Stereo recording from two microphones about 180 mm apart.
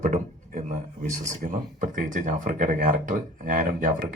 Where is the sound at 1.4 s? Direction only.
45° right (ahead or behind).